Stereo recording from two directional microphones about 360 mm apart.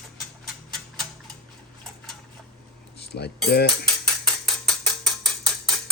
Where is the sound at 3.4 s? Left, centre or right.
Left.